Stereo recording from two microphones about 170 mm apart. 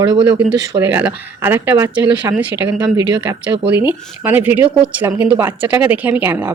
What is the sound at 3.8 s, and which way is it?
Speech, 10° right (ahead or behind).